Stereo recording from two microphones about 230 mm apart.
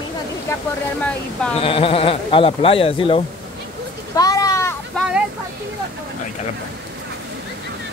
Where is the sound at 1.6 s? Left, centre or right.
Left.